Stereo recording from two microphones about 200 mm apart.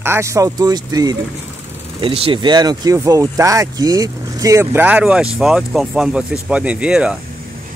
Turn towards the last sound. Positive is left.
turn(degrees=-5)  # may be behind; listen again after turning